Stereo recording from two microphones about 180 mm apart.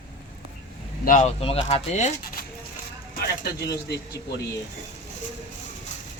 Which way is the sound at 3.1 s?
60° left (ahead or behind).